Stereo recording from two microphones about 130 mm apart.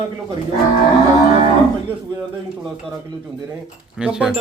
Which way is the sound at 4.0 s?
5° right (ahead or behind).